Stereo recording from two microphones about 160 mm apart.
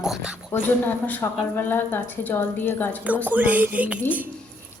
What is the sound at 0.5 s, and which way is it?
A woman's voice, 10° left (ahead or behind).